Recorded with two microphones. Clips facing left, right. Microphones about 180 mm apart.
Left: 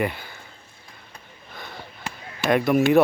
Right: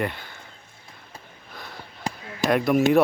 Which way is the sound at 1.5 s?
Centre (ahead or behind).